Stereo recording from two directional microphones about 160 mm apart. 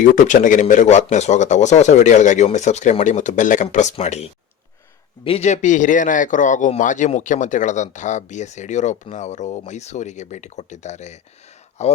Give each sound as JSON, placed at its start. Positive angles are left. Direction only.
{"t": 0.0, "sound": "speech", "side_deg": 55}